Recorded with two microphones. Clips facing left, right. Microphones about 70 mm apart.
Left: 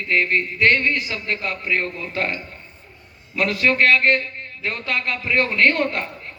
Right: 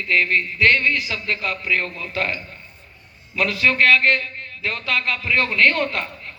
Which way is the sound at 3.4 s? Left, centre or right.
Left.